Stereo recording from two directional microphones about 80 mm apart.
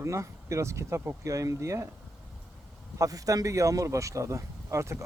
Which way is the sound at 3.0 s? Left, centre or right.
Right.